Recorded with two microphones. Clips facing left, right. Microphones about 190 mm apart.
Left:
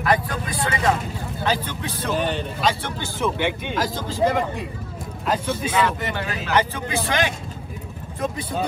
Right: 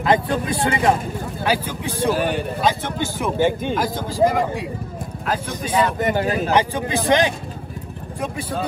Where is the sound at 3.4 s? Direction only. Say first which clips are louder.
Right 5 dB; 45° right (ahead or behind).